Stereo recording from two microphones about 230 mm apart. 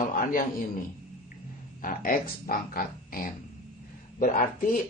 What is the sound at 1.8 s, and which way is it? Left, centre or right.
A man's voice, left.